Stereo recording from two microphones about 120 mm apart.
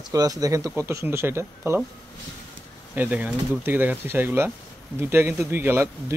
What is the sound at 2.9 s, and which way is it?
Speech, 15° right (ahead or behind).